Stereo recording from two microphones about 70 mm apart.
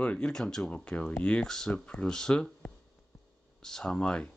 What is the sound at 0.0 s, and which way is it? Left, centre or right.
Speech, centre.